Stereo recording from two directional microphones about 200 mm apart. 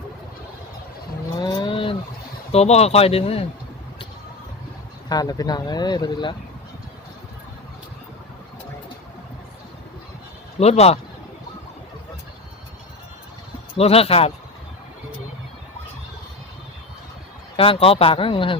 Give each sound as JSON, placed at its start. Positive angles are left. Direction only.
{"t": 1.4, "sound": "vehicle", "side_deg": 20}
{"t": 2.5, "sound": "speech", "side_deg": 30}
{"t": 5.0, "sound": "speech", "side_deg": 20}
{"t": 10.6, "sound": "speech", "side_deg": 30}
{"t": 13.7, "sound": "speech", "side_deg": 30}
{"t": 17.6, "sound": "speech", "side_deg": 30}